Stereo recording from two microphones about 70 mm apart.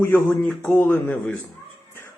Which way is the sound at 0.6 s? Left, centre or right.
Left.